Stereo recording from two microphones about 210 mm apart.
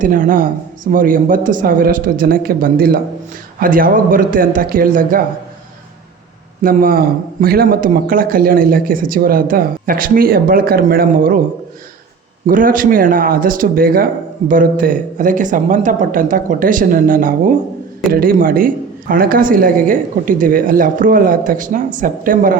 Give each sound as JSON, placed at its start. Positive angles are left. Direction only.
{"t": 0.0, "sound": "speech", "side_deg": -40}
{"t": 6.6, "sound": "speech", "side_deg": -40}
{"t": 12.5, "sound": "speech", "side_deg": -40}